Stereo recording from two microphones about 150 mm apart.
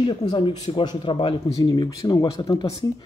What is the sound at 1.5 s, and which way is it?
Speech, 25° left (ahead or behind).